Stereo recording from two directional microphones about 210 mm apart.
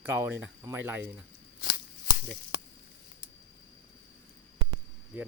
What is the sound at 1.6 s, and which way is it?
Scissors, 45° left (ahead or behind).